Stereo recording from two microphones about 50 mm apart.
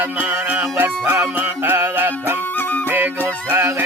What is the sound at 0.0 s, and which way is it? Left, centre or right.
Music, right.